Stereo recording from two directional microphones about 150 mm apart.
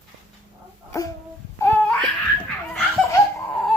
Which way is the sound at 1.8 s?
5° left (ahead or behind).